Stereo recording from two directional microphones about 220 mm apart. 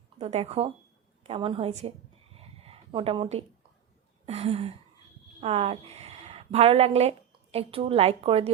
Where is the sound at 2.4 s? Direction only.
25° right (ahead or behind).